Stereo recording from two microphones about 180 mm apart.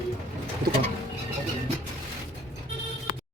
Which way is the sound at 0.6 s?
55° right (ahead or behind).